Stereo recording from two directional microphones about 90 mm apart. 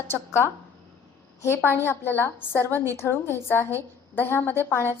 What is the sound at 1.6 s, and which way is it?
A woman's voice, 25° left (ahead or behind).